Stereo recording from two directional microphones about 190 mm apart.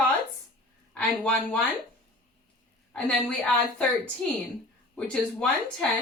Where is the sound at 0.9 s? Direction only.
5° left (ahead or behind).